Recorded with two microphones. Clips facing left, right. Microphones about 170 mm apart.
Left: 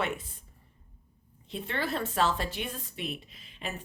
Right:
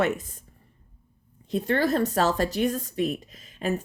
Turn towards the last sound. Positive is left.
turn(degrees=-45)  # may be behind; listen again after turning